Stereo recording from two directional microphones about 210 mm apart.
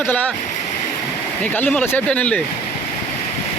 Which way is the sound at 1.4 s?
10° left (ahead or behind).